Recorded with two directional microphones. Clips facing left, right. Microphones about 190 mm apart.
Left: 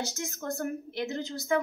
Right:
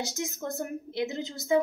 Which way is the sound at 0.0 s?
15° right (ahead or behind).